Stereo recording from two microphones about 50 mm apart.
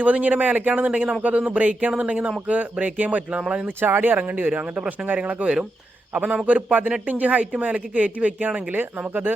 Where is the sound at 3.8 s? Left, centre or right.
Right.